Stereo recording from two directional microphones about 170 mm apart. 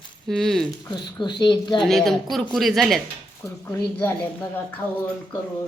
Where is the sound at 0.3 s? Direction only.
Centre (ahead or behind).